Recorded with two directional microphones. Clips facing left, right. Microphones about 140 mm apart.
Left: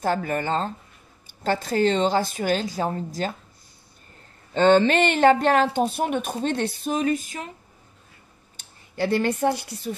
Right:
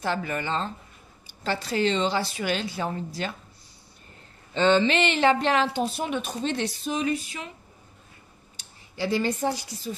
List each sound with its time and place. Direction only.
0.0 s speech: 45° left (ahead or behind)
4.6 s speech: 50° left (ahead or behind)
8.5 s speech: 55° left (ahead or behind)